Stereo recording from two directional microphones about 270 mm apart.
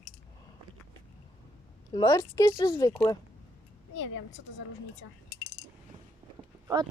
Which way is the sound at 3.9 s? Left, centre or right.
Left.